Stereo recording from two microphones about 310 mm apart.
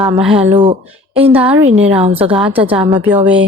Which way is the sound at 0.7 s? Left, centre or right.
Centre.